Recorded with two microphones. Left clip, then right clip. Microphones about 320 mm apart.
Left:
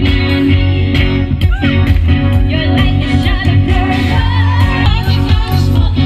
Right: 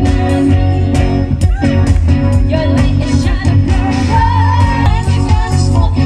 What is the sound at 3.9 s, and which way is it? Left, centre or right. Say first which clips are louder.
Music: right 7 dB; right.